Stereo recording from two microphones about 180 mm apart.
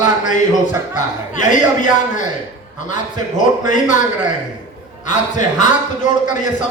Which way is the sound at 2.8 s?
45° left (ahead or behind).